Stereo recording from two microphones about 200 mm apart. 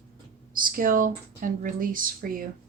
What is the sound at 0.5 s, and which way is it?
Speech, 45° right (ahead or behind).